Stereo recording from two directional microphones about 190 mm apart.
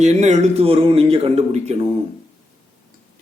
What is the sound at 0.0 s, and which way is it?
Speech, 35° right (ahead or behind).